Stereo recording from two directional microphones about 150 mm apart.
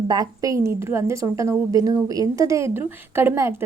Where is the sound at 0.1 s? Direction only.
25° right (ahead or behind).